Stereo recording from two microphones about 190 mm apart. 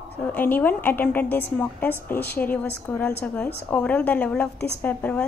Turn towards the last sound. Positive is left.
turn(degrees=5)  # may be behind; listen again after turning